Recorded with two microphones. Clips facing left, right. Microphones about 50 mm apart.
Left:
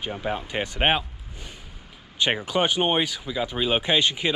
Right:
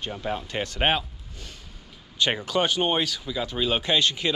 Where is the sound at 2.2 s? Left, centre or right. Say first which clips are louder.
Left 1 dB; centre.